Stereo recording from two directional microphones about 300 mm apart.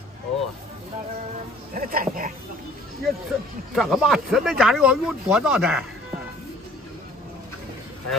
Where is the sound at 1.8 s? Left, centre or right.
Right.